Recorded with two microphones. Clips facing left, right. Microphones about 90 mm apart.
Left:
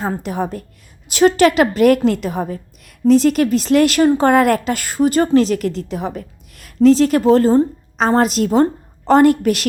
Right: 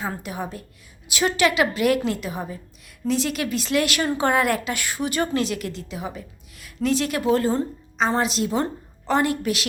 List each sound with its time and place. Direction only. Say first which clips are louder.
0.0 s a woman's voice: left 8 dB; 40° left (ahead or behind)
4.3 s a woman's voice: left 8 dB; 50° left (ahead or behind)